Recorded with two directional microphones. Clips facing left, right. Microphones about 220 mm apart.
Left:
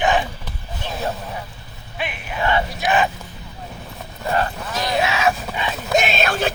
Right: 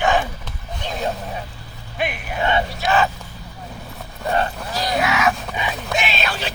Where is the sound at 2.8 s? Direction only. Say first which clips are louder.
Even; 15° left (ahead or behind).